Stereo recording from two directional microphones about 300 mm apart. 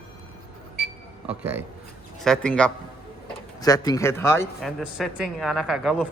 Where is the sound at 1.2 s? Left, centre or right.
Centre.